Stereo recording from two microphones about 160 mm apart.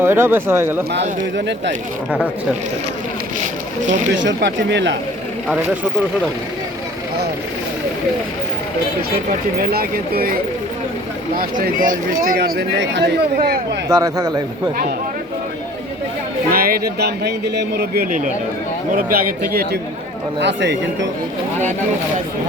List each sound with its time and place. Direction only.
0.0 s speech: 15° right (ahead or behind)
3.8 s speech: 50° right (ahead or behind)
4.4 s speech: 90° right
9.6 s speech: 70° right (ahead or behind)
11.3 s speech: 60° right (ahead or behind); by 13.6 s 85° right
13.8 s speech: 20° right (ahead or behind)
16.5 s speech: 65° right (ahead or behind)
20.4 s speech: 90° right